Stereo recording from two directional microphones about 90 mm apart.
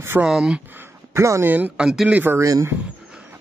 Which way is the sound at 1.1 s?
30° right (ahead or behind).